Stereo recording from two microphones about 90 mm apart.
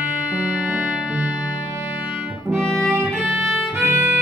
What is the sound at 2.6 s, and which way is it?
Music, 5° left (ahead or behind).